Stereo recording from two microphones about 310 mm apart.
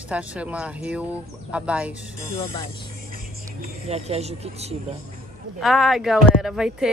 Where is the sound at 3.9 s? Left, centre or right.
Centre.